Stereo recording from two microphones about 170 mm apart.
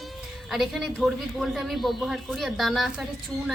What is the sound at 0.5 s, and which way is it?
A woman's voice, centre (ahead or behind).